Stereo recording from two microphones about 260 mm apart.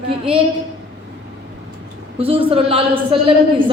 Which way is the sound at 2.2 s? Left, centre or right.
Right.